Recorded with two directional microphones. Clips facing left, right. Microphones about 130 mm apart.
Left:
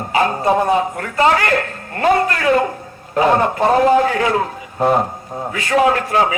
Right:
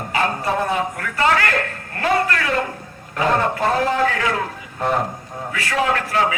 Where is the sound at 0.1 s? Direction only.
25° left (ahead or behind).